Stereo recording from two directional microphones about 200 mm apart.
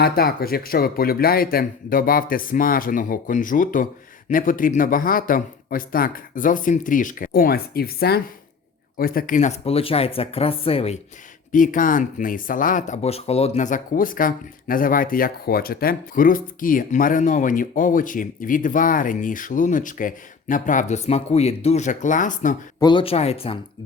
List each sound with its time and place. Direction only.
0.0 s speech: 50° left (ahead or behind); by 11.0 s 30° left (ahead or behind)
11.5 s speech: 40° left (ahead or behind)
22.8 s speech: 25° left (ahead or behind)